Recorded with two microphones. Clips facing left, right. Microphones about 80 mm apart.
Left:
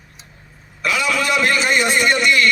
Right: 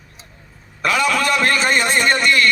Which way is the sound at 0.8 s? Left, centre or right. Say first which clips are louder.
Right 2 dB; right.